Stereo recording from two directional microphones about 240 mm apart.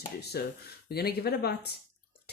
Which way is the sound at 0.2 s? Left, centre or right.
Left.